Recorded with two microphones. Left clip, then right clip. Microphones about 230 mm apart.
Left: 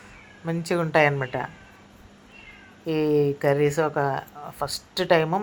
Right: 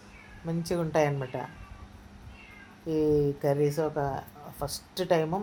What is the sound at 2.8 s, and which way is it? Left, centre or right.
Speech, centre.